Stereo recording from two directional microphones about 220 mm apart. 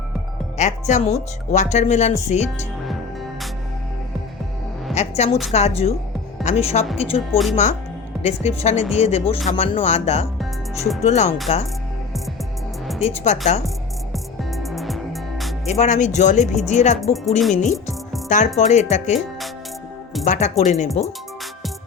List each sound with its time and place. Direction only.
0.5 s speech: 30° left (ahead or behind)
4.9 s a woman's voice: 30° left (ahead or behind)
7.3 s speech: centre (ahead or behind)
7.5 s speech: 30° left (ahead or behind)
13.0 s speech: 30° left (ahead or behind)
14.1 s music: centre (ahead or behind)
15.6 s speech: 30° left (ahead or behind)
20.2 s speech: 35° left (ahead or behind)